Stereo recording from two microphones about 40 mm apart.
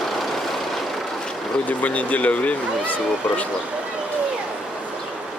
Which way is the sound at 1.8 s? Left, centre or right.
Left.